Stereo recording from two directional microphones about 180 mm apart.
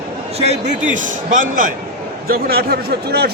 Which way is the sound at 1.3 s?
45° right (ahead or behind).